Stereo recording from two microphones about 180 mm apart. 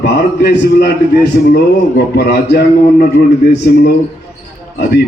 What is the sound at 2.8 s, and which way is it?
Speech, 45° left (ahead or behind).